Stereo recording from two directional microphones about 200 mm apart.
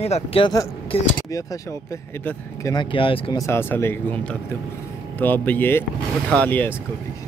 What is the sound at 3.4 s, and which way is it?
Speech, 10° left (ahead or behind).